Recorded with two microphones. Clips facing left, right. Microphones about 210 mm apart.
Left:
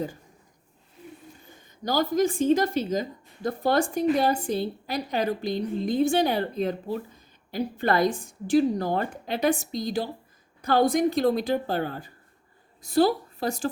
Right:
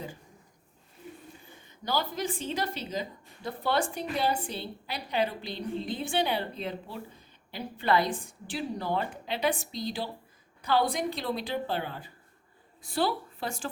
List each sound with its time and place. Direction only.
1.8 s a woman's voice: 45° left (ahead or behind)